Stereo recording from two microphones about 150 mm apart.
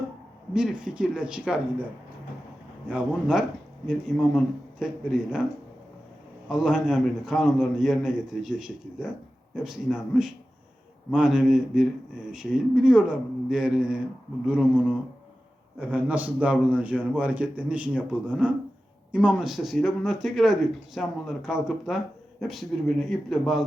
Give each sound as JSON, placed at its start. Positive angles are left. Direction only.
{"t": 0.5, "sound": "a man's voice", "side_deg": -5}
{"t": 2.8, "sound": "a man's voice", "side_deg": -5}
{"t": 6.5, "sound": "a man's voice", "side_deg": -5}